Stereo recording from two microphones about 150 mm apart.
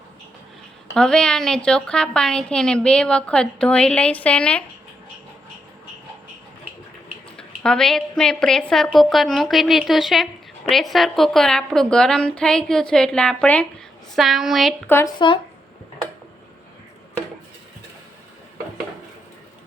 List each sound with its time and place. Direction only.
0.9 s a woman's voice: 5° left (ahead or behind)
7.3 s a woman's voice: 5° left (ahead or behind)
14.8 s speech: 15° left (ahead or behind)